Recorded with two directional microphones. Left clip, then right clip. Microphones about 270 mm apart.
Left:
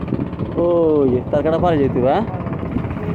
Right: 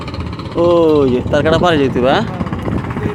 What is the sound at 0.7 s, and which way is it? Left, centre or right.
Speech, centre.